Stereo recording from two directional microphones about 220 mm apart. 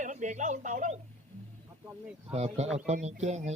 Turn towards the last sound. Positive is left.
turn(degrees=-30)  # may be behind; listen again after turning